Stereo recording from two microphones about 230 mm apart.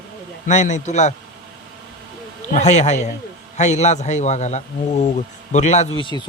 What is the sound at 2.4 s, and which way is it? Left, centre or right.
A man's voice, left.